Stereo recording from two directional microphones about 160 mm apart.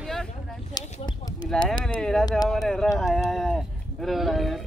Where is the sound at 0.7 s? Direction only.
25° left (ahead or behind).